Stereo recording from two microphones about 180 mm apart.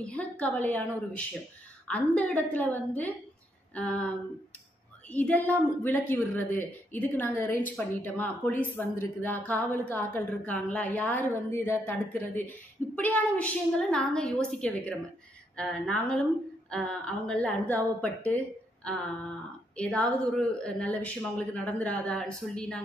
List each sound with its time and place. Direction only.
0.0 s a woman's voice: 5° left (ahead or behind)
5.1 s a woman's voice: 10° left (ahead or behind)
19.8 s a woman's voice: 5° left (ahead or behind)